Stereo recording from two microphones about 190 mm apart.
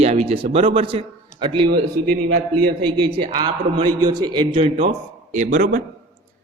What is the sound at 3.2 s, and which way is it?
A man's voice, 25° right (ahead or behind).